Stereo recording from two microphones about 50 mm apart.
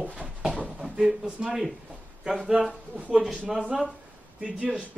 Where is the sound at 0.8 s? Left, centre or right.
Centre.